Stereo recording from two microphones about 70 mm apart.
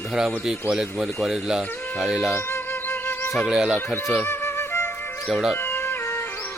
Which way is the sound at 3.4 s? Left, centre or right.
Centre.